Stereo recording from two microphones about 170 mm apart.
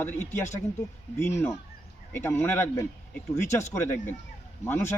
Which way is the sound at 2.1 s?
15° left (ahead or behind).